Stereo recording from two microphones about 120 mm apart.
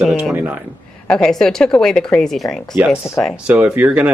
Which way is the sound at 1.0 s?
5° left (ahead or behind).